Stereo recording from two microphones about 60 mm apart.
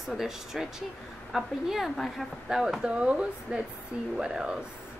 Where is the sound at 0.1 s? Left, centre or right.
Centre.